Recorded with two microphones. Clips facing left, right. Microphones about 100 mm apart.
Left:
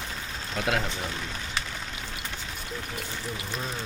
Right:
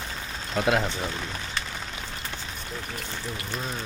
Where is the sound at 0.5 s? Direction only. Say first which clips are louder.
Right 4 dB; 20° right (ahead or behind).